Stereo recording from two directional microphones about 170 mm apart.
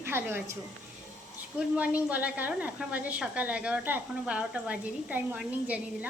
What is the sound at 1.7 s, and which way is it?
A woman's voice, 10° right (ahead or behind).